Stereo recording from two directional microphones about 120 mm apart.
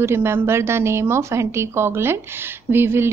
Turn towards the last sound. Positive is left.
turn(degrees=-20)  # may be behind; listen again after turning